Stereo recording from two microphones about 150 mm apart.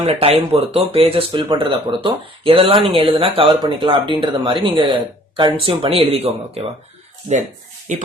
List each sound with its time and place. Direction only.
0.0 s speech: 40° right (ahead or behind)